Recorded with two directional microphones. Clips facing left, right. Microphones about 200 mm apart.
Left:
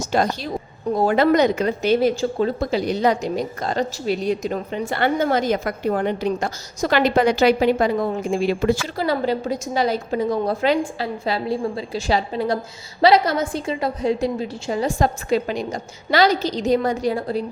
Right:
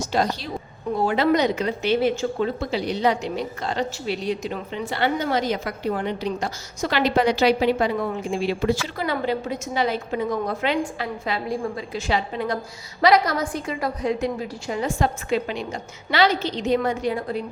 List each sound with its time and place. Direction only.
0.1 s a woman's voice: 50° left (ahead or behind)
9.0 s a woman's voice: 35° left (ahead or behind)